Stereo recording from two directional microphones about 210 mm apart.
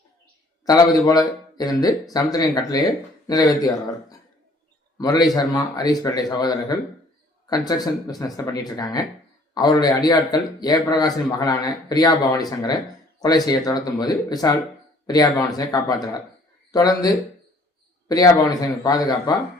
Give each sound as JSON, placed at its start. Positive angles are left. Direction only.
{"t": 0.6, "sound": "speech", "side_deg": 15}
{"t": 4.9, "sound": "speech", "side_deg": 20}